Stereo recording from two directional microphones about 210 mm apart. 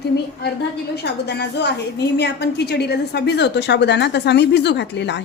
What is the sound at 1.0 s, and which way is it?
A woman's voice, 55° left (ahead or behind).